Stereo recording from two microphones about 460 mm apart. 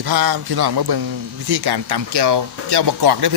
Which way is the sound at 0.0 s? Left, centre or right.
Right.